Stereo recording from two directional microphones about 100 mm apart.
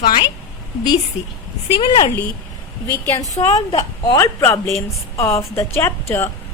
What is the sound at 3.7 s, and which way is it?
A woman's voice, 40° left (ahead or behind).